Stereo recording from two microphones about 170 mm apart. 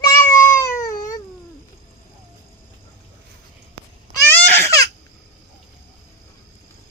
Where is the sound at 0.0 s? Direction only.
15° left (ahead or behind).